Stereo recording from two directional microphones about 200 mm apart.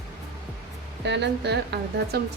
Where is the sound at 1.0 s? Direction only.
60° right (ahead or behind).